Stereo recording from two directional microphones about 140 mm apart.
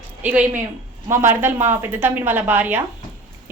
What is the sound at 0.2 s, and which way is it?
A woman's voice, 10° right (ahead or behind).